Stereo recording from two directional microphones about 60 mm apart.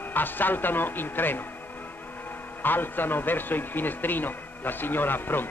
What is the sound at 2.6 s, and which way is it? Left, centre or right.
Speech, left.